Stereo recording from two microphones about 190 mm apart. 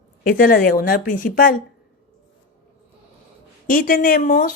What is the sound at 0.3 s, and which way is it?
A woman's voice, 45° left (ahead or behind).